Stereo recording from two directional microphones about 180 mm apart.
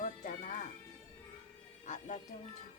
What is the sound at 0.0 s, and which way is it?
Music, 45° left (ahead or behind).